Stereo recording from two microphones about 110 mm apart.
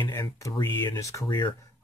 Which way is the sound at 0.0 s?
25° left (ahead or behind).